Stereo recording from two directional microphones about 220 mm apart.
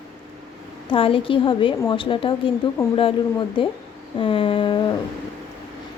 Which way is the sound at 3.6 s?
25° left (ahead or behind).